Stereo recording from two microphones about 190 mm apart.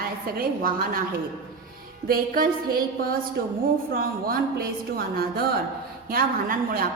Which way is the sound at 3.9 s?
50° right (ahead or behind).